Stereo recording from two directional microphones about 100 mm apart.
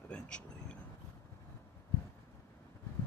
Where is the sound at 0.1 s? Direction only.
10° left (ahead or behind).